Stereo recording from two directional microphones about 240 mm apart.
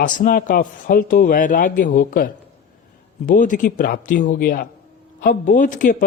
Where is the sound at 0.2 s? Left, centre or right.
Left.